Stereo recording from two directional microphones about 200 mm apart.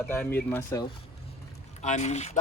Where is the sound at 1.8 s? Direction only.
35° left (ahead or behind).